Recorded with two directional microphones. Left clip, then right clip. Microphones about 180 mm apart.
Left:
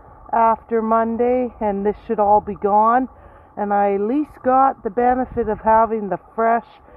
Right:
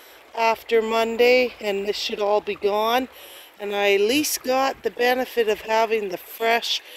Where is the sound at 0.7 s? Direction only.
25° right (ahead or behind).